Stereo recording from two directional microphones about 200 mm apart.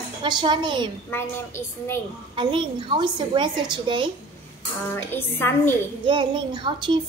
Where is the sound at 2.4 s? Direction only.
25° right (ahead or behind).